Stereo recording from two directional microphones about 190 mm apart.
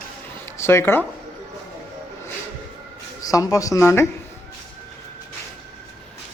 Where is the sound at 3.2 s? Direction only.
20° left (ahead or behind).